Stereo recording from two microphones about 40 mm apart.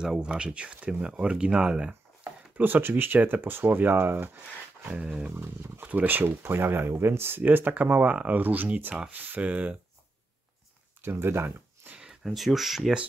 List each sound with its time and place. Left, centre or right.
0.0 s speech: centre
2.5 s speech: right
5.3 s speech: right
5.8 s speech: right
6.2 s speech: right
7.9 s speech: right
11.0 s speech: right
12.3 s speech: centre